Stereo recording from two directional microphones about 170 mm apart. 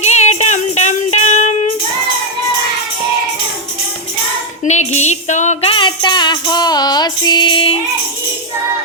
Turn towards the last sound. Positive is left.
turn(degrees=30)  # may be behind; listen again after turning